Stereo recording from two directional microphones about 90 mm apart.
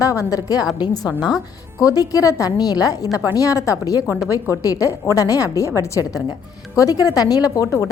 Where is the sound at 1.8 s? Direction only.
40° left (ahead or behind).